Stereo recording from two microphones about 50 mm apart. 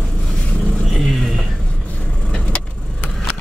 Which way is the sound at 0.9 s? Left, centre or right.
Centre.